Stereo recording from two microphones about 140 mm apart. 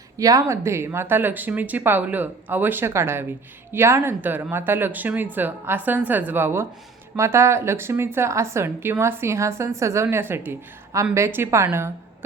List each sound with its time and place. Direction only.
0.2 s a woman's voice: 25° right (ahead or behind)